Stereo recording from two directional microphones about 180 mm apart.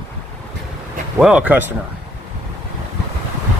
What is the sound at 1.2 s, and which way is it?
Speech, 5° right (ahead or behind).